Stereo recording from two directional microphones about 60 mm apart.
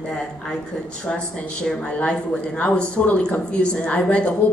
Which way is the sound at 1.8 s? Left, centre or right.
Centre.